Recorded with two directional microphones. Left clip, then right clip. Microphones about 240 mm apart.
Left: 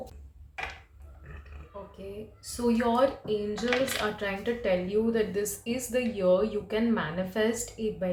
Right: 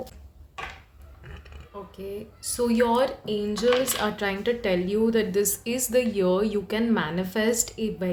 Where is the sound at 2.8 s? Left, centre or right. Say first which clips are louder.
Right 3 dB; right.